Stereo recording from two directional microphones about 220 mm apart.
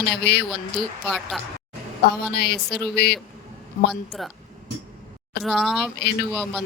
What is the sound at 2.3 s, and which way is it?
Speech, 50° left (ahead or behind).